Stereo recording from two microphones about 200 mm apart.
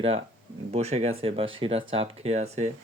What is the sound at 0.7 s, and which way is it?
Speech, 30° right (ahead or behind).